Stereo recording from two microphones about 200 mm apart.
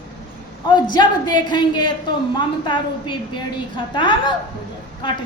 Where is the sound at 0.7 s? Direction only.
20° left (ahead or behind).